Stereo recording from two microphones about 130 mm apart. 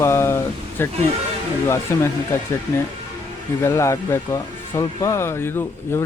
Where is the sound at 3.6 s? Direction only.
20° left (ahead or behind).